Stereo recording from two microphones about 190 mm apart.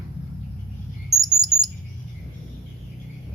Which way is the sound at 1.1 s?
20° right (ahead or behind).